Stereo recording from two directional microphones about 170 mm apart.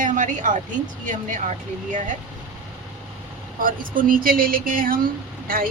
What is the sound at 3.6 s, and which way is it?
Speech, 55° right (ahead or behind).